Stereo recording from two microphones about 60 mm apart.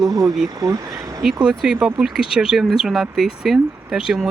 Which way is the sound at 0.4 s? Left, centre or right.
Right.